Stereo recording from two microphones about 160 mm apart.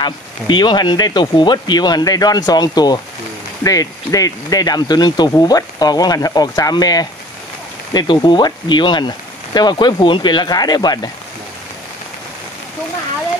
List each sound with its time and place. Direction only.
0.0 s speech: 30° left (ahead or behind)